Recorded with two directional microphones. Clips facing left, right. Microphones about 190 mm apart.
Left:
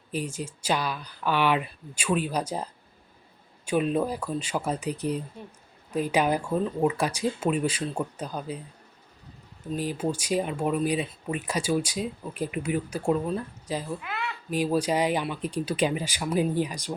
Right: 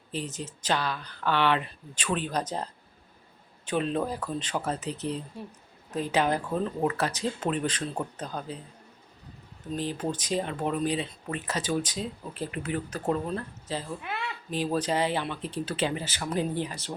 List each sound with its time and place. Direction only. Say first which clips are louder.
0.1 s speech: left 3 dB; 10° left (ahead or behind)
3.7 s speech: left 3 dB; 10° left (ahead or behind)
9.7 s speech: left 2 dB; 10° left (ahead or behind)
14.0 s a sound: left 1 dB; 30° right (ahead or behind)
14.5 s speech: left 3 dB; 10° left (ahead or behind)